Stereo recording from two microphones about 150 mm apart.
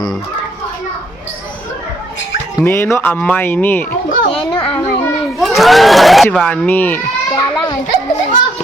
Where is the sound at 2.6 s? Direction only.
15° left (ahead or behind).